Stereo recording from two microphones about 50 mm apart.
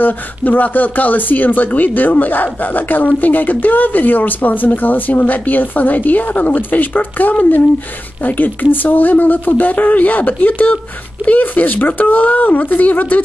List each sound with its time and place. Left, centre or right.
0.0 s speech: left